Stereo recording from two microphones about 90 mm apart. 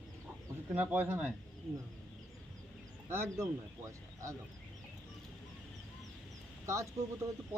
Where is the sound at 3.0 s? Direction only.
30° right (ahead or behind).